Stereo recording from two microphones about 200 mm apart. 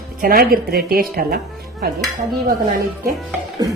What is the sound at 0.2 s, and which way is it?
A woman's voice, 45° right (ahead or behind).